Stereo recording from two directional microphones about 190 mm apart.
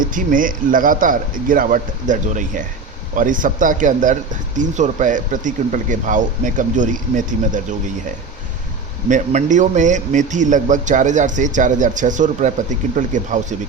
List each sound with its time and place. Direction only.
0.0 s speech: 45° right (ahead or behind)
9.0 s a man's voice: 40° right (ahead or behind)